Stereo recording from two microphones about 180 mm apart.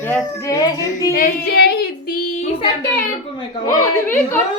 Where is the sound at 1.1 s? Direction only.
60° left (ahead or behind).